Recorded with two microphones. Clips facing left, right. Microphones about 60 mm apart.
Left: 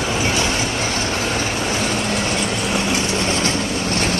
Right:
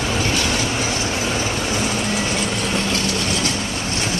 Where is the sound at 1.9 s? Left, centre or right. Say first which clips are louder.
Left 1 dB; centre.